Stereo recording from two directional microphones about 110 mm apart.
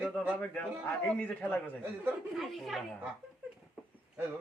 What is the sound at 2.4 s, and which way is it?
Speech, centre (ahead or behind).